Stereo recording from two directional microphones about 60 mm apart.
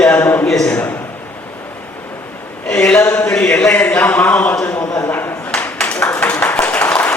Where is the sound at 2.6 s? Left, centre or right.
Centre.